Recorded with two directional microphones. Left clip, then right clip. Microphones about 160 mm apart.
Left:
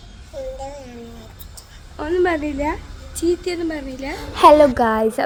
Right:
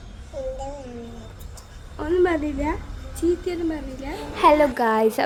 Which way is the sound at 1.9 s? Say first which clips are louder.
Left 2 dB; 25° left (ahead or behind).